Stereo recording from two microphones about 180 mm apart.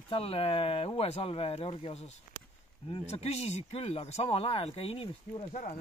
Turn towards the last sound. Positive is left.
turn(degrees=45)  # may be behind; listen again after turning